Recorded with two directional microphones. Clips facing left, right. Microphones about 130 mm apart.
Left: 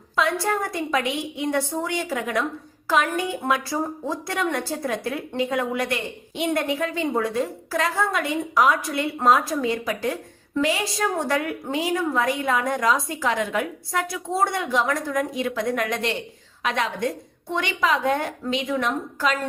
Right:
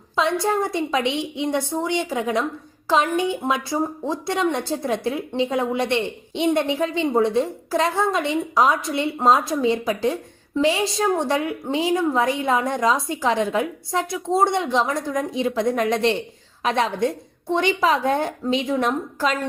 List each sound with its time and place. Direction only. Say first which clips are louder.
0.2 s a woman's voice: right 2 dB; 25° right (ahead or behind)